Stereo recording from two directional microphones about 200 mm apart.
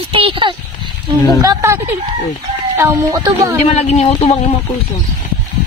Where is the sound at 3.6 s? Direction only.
30° left (ahead or behind).